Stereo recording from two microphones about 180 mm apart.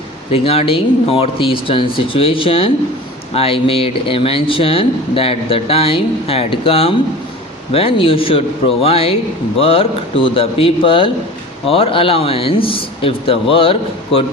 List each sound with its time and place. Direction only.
0.3 s speech: 35° left (ahead or behind)